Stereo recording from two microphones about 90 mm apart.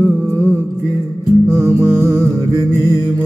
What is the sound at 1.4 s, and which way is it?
Music, 30° right (ahead or behind).